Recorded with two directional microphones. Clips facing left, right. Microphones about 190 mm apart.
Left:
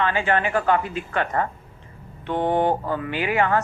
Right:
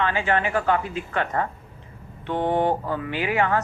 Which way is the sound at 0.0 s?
50° left (ahead or behind).